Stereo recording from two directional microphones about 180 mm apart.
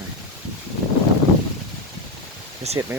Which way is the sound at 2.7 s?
35° right (ahead or behind).